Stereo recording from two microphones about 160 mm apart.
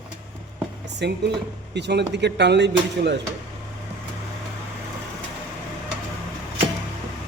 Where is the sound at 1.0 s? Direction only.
90° right.